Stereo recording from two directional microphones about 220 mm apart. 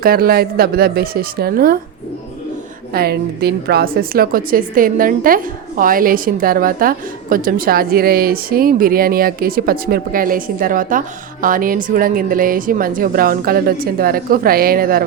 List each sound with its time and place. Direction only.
0.0 s a woman's voice: 45° right (ahead or behind)
2.9 s a woman's voice: 45° right (ahead or behind)